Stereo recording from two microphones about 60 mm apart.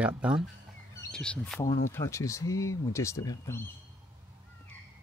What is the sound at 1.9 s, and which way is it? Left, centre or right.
Speech, left.